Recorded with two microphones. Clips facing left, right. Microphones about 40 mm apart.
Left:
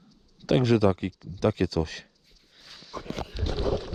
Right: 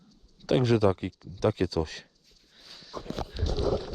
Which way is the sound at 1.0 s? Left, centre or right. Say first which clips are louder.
Left 1 dB; left.